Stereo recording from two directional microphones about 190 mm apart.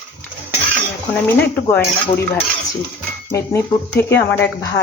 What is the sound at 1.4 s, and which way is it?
Speech, 10° left (ahead or behind).